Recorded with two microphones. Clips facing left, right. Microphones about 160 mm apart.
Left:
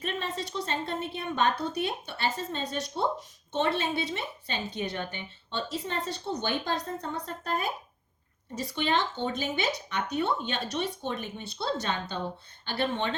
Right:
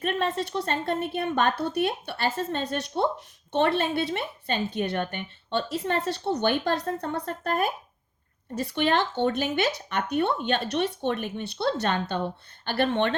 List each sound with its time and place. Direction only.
0.0 s a woman's voice: 60° right (ahead or behind)